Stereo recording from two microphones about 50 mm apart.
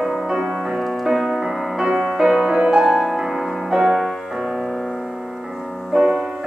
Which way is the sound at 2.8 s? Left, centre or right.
Centre.